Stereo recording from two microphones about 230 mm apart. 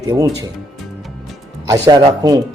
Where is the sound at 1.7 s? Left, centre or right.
Centre.